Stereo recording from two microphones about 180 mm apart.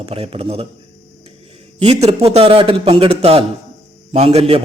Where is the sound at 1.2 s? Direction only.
35° right (ahead or behind).